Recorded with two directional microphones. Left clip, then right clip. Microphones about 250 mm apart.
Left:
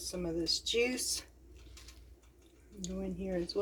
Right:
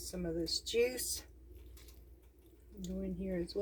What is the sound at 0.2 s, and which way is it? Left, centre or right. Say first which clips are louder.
Speech: left 3 dB; centre.